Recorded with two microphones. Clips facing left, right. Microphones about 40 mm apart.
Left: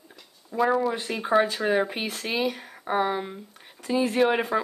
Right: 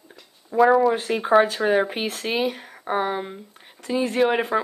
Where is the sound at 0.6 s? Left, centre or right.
Centre.